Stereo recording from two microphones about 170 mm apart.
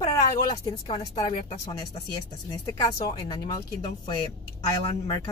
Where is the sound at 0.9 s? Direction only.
35° left (ahead or behind).